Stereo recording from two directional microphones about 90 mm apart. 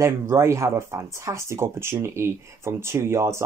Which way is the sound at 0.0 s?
30° right (ahead or behind).